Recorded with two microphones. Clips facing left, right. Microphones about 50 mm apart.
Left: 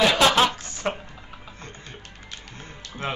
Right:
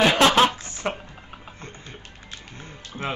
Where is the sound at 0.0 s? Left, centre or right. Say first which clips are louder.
Right 1 dB; right.